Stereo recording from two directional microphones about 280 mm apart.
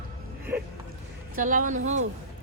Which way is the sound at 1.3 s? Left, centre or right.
Right.